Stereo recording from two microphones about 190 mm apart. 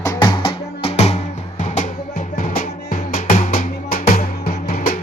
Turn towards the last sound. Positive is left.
turn(degrees=50)  # may be behind; listen again after turning